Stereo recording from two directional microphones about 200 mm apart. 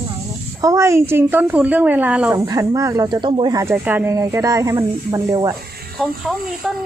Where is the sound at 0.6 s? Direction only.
15° right (ahead or behind).